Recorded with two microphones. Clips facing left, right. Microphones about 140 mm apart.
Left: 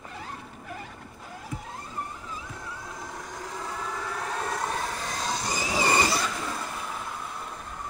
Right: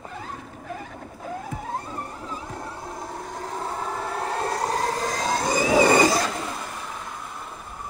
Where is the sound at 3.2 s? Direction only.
55° right (ahead or behind).